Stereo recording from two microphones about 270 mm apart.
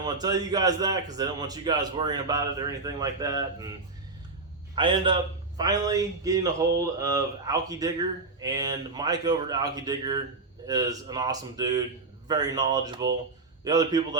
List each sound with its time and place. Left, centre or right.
0.0 s a man's voice: centre